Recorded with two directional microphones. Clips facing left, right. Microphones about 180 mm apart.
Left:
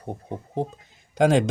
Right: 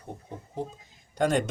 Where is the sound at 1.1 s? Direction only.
90° left.